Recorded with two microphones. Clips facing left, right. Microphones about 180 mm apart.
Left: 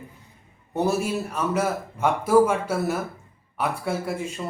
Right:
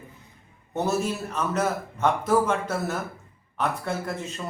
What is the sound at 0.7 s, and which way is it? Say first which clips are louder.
A man's voice: left 2 dB; 10° left (ahead or behind).